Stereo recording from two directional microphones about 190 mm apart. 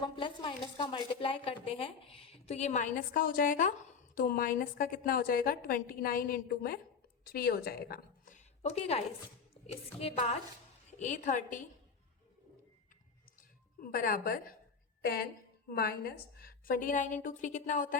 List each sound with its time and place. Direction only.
0.0 s a woman's voice: 25° left (ahead or behind); by 11.6 s 40° left (ahead or behind)
13.8 s a woman's voice: 50° left (ahead or behind)